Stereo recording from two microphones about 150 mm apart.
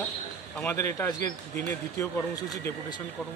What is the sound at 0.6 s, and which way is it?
Speech, 15° left (ahead or behind).